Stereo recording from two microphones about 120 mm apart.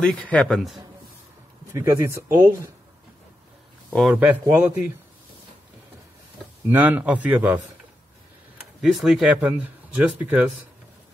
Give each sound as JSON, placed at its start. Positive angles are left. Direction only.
{"t": 0.0, "sound": "a man's voice", "side_deg": 10}
{"t": 1.7, "sound": "speech", "side_deg": -25}
{"t": 4.1, "sound": "speech", "side_deg": -15}
{"t": 6.7, "sound": "speech", "side_deg": -15}
{"t": 8.8, "sound": "speech", "side_deg": 0}